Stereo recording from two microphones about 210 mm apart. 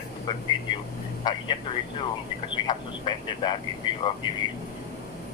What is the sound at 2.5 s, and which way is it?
A woman's voice, 20° left (ahead or behind).